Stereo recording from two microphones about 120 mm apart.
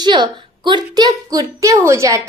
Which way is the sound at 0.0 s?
40° right (ahead or behind).